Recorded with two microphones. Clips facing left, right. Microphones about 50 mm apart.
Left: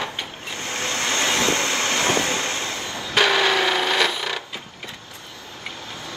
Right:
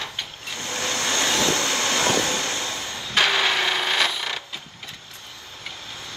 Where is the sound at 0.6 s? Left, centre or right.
Left.